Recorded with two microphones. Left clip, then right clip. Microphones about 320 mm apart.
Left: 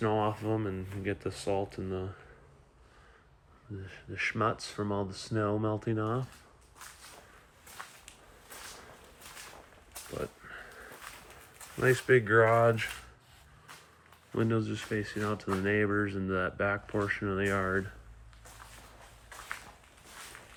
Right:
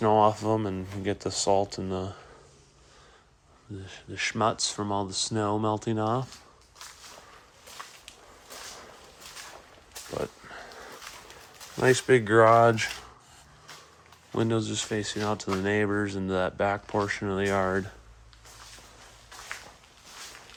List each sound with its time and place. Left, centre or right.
0.0 s speech: centre
3.8 s speech: centre
10.4 s a sound: centre
11.8 s speech: centre
14.3 s speech: centre